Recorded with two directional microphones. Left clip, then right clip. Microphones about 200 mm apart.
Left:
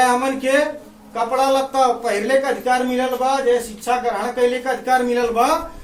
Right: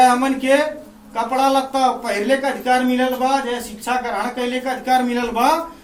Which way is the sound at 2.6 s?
15° left (ahead or behind).